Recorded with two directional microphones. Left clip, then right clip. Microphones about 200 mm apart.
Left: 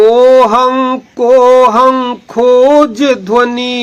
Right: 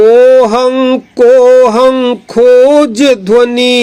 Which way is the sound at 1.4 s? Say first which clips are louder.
Right 1 dB; 30° right (ahead or behind).